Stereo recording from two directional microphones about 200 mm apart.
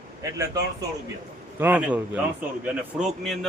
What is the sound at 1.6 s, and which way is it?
A man's voice, 5° right (ahead or behind).